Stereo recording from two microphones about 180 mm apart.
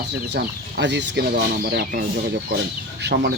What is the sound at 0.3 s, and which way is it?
Speech, 75° right (ahead or behind).